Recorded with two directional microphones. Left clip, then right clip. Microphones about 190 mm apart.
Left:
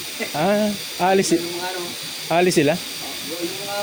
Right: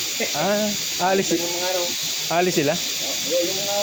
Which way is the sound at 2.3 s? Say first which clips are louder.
Left 4 dB; 55° left (ahead or behind).